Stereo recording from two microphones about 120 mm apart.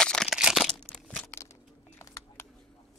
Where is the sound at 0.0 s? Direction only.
5° left (ahead or behind).